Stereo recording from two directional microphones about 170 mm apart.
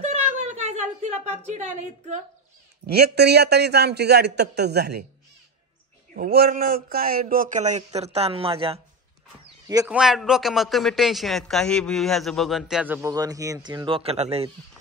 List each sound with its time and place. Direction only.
0.0 s a sound: 45° right (ahead or behind)
2.9 s a man's voice: 75° right (ahead or behind)
6.1 s speech: 60° right (ahead or behind); by 8.8 s 35° right (ahead or behind)
9.8 s a man's voice: 5° right (ahead or behind)
13.1 s speech: 20° right (ahead or behind); by 14.5 s 40° right (ahead or behind)